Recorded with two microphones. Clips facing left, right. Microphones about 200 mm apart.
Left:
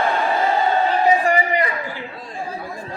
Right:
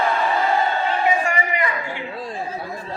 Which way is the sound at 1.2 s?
35° left (ahead or behind).